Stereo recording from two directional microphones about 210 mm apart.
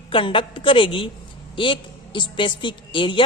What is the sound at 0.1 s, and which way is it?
Speech, 25° left (ahead or behind).